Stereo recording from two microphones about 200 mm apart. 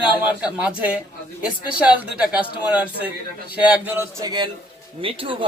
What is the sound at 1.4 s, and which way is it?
A man's voice, 5° right (ahead or behind).